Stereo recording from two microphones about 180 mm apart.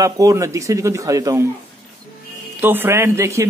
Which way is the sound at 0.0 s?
20° right (ahead or behind).